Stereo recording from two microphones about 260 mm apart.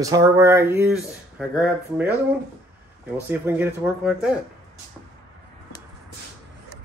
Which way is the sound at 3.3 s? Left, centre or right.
Centre.